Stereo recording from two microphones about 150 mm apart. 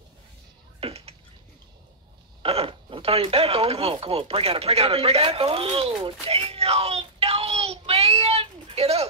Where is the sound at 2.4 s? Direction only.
40° right (ahead or behind).